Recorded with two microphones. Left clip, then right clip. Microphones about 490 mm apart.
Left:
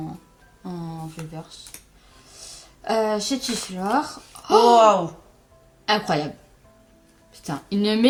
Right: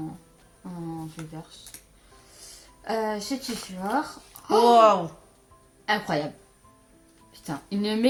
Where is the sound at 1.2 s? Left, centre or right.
Right.